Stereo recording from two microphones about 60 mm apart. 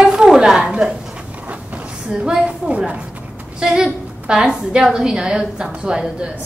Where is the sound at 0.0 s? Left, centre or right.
Centre.